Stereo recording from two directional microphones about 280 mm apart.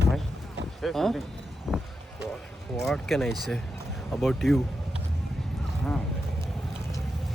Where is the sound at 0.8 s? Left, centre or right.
Centre.